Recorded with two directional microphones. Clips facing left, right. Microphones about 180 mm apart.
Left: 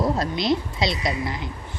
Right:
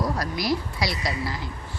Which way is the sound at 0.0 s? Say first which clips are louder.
Left 4 dB; 25° left (ahead or behind).